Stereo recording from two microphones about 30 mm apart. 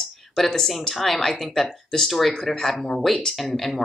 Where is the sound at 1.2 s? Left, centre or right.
Centre.